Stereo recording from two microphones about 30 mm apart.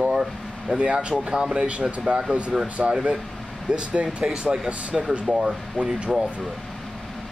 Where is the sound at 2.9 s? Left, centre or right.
Right.